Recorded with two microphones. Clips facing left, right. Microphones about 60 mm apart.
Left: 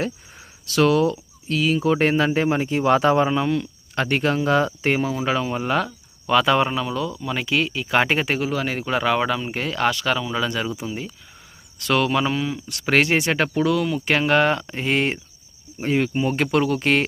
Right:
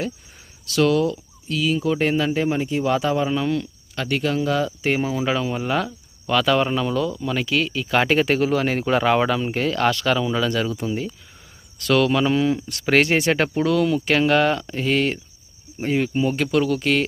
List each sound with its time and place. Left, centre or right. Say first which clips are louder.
0.7 s speech: left 1 dB; left
3.2 s speech: left 1 dB; centre
3.9 s speech: left 2 dB; left
4.9 s speech: even; centre
5.2 s speech: even; centre
6.4 s speech: right 1 dB; centre
6.7 s speech: right 3 dB; centre
8.4 s speech: right 4 dB; centre
13.0 s speech: right 1 dB; left
13.7 s speech: right 2 dB; centre
14.2 s speech: left 1 dB; left
15.8 s speech: even; centre
16.3 s speech: even; left